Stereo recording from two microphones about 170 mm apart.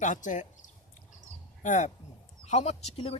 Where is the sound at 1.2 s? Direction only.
50° left (ahead or behind).